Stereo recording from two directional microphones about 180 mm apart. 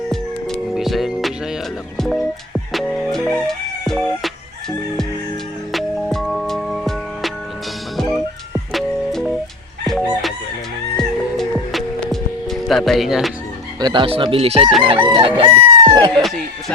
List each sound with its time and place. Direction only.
0.1 s music: centre (ahead or behind)
5.7 s music: centre (ahead or behind)
8.7 s music: centre (ahead or behind)
9.8 s chicken: centre (ahead or behind)
10.9 s music: centre (ahead or behind)
13.7 s speech: 25° right (ahead or behind)
15.4 s chicken: 25° right (ahead or behind)
16.1 s music: centre (ahead or behind)